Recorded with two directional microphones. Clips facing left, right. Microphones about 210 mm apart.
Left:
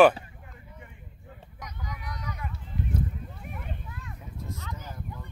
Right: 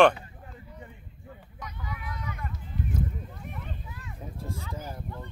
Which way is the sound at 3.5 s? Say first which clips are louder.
Left 1 dB; centre (ahead or behind).